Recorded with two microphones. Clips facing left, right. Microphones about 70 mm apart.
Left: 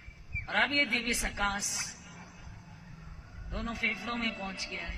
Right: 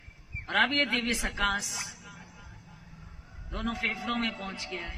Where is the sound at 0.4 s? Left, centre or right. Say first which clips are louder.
Right 3 dB; right.